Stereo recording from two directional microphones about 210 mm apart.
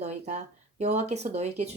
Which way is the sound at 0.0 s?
35° right (ahead or behind).